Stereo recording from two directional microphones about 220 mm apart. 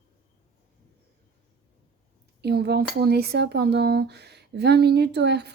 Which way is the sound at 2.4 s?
50° right (ahead or behind).